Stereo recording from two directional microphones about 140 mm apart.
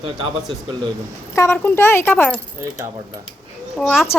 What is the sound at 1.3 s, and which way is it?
Speech, 15° left (ahead or behind).